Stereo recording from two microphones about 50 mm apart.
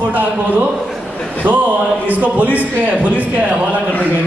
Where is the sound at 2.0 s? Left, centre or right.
Right.